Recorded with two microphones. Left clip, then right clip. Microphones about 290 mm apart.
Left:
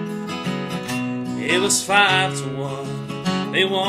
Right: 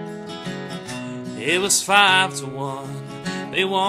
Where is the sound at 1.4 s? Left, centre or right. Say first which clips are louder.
Even; right.